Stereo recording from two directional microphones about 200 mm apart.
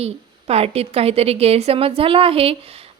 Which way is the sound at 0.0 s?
30° right (ahead or behind).